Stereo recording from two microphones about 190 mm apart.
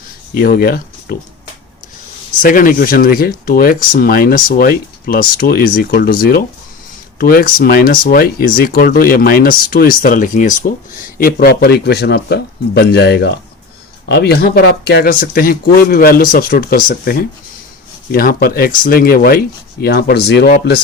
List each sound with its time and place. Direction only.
0.3 s speech: 50° left (ahead or behind)
2.4 s speech: 45° left (ahead or behind)